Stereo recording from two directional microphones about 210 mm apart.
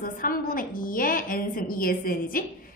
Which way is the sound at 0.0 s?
45° left (ahead or behind).